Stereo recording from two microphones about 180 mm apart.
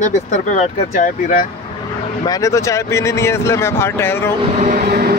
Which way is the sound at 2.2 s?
20° left (ahead or behind).